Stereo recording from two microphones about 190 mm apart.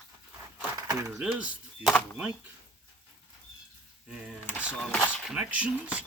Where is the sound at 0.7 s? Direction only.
15° right (ahead or behind).